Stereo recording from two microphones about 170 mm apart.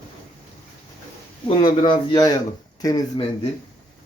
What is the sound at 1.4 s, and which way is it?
A man's voice, 30° left (ahead or behind).